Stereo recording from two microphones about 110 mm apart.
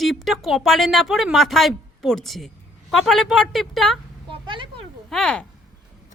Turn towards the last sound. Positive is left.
turn(degrees=10)  # may be behind; listen again after turning